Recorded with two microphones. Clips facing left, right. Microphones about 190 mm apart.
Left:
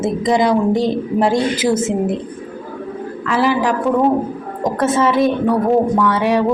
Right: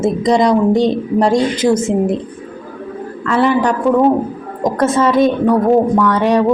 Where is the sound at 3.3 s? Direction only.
5° left (ahead or behind).